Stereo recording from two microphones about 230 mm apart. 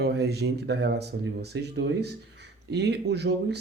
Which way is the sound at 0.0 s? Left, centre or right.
Right.